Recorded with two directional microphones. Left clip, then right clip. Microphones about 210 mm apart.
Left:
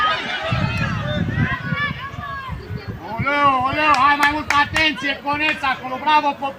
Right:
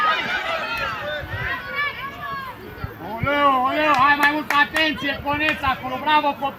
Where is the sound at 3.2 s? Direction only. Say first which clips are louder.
Left 1 dB; 35° left (ahead or behind).